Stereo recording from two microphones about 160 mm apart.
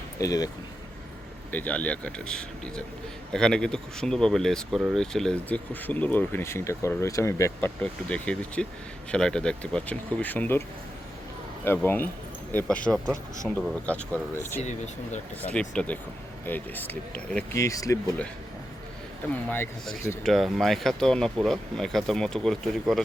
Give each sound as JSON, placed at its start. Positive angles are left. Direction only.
{"t": 0.2, "sound": "speech", "side_deg": 25}
{"t": 1.5, "sound": "speech", "side_deg": 10}
{"t": 7.8, "sound": "speech", "side_deg": 5}
{"t": 11.6, "sound": "speech", "side_deg": 15}
{"t": 14.6, "sound": "speech", "side_deg": 45}
{"t": 15.5, "sound": "speech", "side_deg": 5}
{"t": 17.6, "sound": "speech", "side_deg": 20}
{"t": 19.5, "sound": "speech", "side_deg": 5}